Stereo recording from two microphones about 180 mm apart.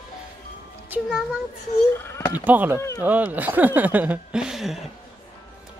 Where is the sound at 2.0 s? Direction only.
15° left (ahead or behind).